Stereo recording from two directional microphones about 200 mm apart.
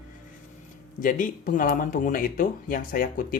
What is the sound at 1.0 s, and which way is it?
Speech, 40° left (ahead or behind).